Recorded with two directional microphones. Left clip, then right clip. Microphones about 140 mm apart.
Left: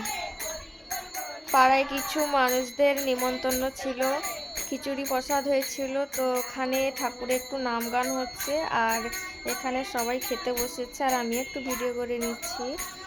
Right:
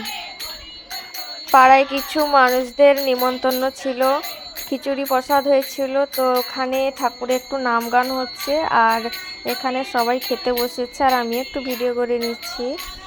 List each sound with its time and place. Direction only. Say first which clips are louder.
1.5 s speech: right 10 dB; 45° right (ahead or behind)